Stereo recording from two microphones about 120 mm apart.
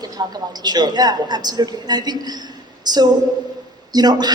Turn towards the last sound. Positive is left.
turn(degrees=-35)  # may be behind; listen again after turning